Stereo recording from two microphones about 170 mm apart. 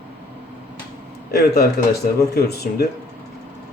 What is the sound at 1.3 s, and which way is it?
A man's voice, 65° left (ahead or behind).